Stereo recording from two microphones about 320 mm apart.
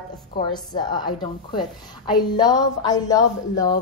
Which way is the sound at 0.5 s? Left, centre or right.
Centre.